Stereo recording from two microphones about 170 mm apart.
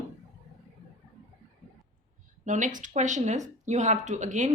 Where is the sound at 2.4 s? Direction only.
50° right (ahead or behind).